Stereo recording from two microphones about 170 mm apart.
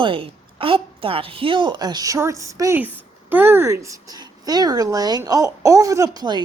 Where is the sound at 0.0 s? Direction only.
30° right (ahead or behind).